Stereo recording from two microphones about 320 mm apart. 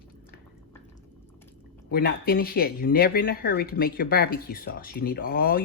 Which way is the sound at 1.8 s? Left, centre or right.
Left.